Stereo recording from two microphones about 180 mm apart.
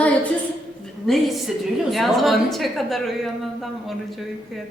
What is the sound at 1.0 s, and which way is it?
Speech, centre (ahead or behind).